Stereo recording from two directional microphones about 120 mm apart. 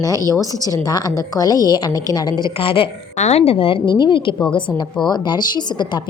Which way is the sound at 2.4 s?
50° left (ahead or behind).